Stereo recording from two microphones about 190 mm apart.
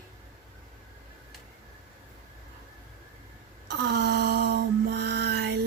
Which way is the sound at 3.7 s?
60° right (ahead or behind).